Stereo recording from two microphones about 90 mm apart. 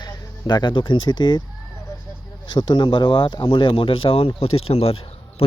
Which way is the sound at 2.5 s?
60° left (ahead or behind).